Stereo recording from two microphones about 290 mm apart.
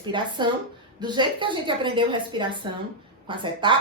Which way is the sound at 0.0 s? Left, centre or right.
Centre.